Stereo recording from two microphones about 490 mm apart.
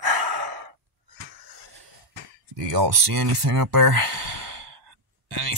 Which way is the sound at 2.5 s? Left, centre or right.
Right.